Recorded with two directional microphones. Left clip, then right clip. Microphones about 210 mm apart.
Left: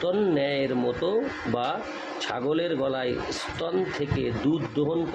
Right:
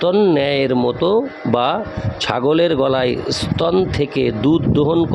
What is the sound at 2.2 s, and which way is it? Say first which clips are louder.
A man's voice: right 12 dB; 55° right (ahead or behind).